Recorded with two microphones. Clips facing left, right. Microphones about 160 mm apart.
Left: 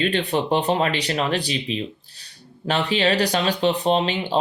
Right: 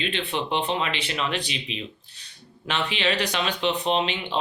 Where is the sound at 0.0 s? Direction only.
40° left (ahead or behind).